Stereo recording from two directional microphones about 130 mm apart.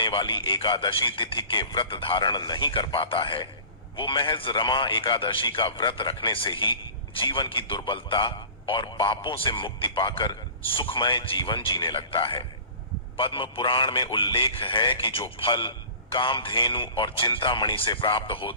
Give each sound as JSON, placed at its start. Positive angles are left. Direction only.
{"t": 0.0, "sound": "a man's voice", "side_deg": 40}